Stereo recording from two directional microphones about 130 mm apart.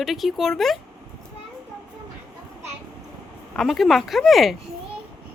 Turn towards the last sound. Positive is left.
turn(degrees=0)  # may be behind; listen again after turning